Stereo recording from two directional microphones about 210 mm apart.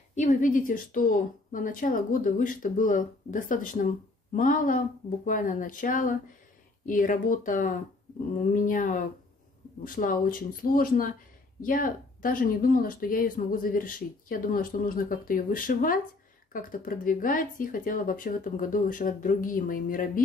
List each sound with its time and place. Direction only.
0.1 s a woman's voice: 35° left (ahead or behind)